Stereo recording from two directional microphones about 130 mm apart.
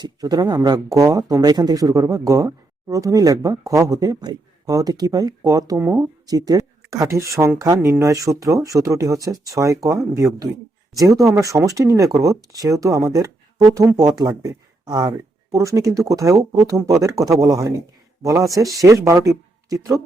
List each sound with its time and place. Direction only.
0.0 s speech: 30° right (ahead or behind)